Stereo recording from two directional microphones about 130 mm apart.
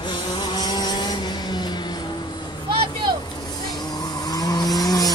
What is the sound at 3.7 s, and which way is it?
Vehicle, 30° left (ahead or behind).